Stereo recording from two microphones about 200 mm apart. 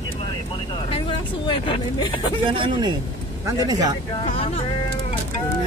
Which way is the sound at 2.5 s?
25° right (ahead or behind).